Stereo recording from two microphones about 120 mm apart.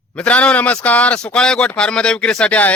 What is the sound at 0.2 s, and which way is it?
Speech, 10° left (ahead or behind).